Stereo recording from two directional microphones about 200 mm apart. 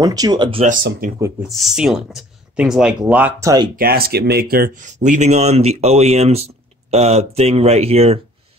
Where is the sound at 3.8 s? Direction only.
50° right (ahead or behind); by 8.1 s 30° right (ahead or behind).